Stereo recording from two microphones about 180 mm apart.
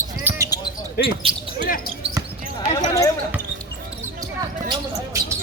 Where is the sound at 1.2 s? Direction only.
30° right (ahead or behind).